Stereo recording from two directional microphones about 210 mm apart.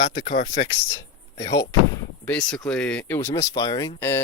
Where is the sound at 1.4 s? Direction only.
20° left (ahead or behind).